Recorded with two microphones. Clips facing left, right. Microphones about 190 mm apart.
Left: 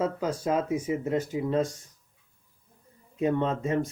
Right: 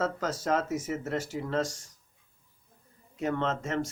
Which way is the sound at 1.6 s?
90° right.